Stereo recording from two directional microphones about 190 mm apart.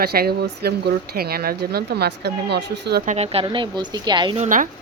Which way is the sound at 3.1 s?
35° right (ahead or behind).